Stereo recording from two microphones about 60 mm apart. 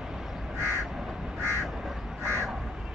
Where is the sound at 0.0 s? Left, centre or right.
Centre.